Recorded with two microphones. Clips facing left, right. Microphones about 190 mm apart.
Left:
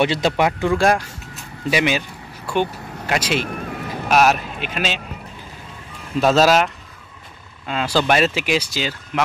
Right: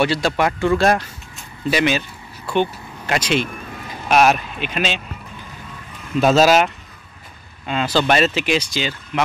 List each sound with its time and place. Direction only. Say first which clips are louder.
0.0 s speech: even; 20° left (ahead or behind)
3.4 s vehicle: left 5 dB; 70° left (ahead or behind)
4.1 s speech: right 1 dB; 5° left (ahead or behind)
6.2 s speech: right 1 dB; centre (ahead or behind)